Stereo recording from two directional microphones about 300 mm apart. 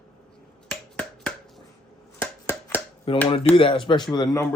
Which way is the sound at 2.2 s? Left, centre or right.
Centre.